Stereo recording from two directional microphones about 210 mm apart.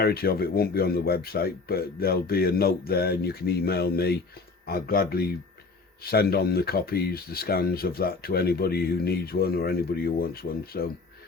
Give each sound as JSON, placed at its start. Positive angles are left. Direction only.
{"t": 0.0, "sound": "speech", "side_deg": 45}